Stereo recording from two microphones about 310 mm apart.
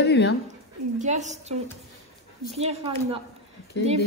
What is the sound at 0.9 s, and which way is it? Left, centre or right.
Speech, right.